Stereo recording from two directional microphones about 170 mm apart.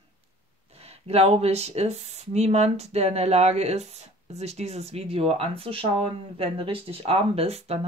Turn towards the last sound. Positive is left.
turn(degrees=-35)  # may be behind; listen again after turning